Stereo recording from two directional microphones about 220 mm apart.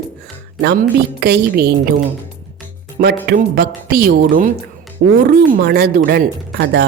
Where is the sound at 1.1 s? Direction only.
50° right (ahead or behind).